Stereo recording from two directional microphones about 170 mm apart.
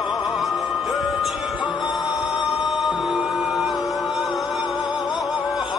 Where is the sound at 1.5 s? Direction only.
25° left (ahead or behind).